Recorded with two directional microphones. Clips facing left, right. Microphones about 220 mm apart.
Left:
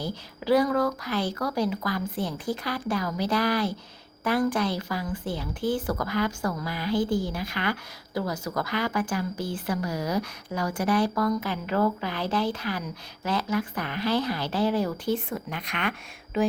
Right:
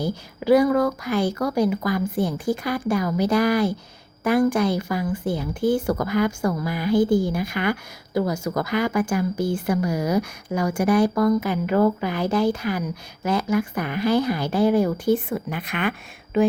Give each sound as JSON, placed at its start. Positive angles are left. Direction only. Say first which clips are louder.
{"t": 0.4, "sound": "speech", "louder": "right 5 dB", "side_deg": -10}
{"t": 6.9, "sound": "speech", "louder": "right 7 dB", "side_deg": -50}
{"t": 7.3, "sound": "a woman's voice", "louder": "right 6 dB", "side_deg": -15}